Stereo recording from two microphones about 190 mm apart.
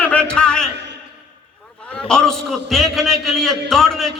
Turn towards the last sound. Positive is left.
turn(degrees=0)  # may be behind; listen again after turning